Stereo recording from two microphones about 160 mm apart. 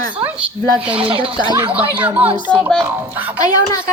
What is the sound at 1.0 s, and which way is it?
Speech, 35° right (ahead or behind).